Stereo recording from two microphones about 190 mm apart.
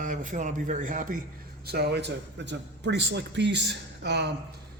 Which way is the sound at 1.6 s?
60° right (ahead or behind).